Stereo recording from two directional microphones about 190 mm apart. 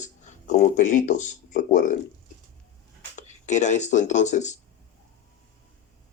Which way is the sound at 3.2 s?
40° left (ahead or behind).